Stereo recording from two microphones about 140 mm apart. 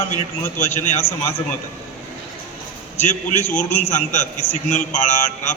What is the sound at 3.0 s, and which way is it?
A man's voice, 55° left (ahead or behind).